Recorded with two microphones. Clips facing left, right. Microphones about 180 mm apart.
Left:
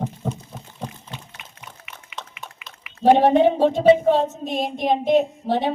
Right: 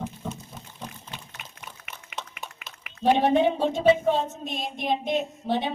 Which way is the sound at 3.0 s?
40° left (ahead or behind).